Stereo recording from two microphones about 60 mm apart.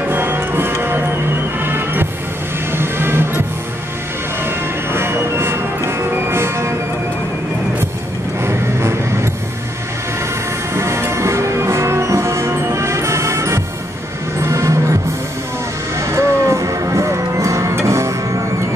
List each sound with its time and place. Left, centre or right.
0.1 s music: right
4.5 s music: right
8.5 s vehicle: right
10.7 s music: right
16.0 s music: right